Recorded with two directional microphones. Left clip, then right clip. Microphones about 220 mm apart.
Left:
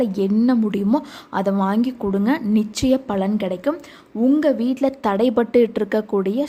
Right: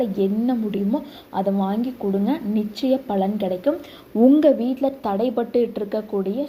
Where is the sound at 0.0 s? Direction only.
20° left (ahead or behind).